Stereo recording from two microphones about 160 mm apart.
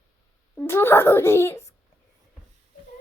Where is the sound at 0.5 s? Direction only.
15° left (ahead or behind).